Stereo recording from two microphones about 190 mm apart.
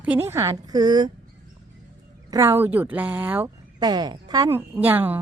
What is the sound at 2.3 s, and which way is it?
A woman's voice, 15° right (ahead or behind).